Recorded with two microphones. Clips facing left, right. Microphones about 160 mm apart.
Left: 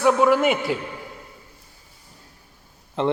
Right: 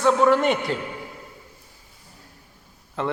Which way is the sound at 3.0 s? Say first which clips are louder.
Left 5 dB; 20° left (ahead or behind).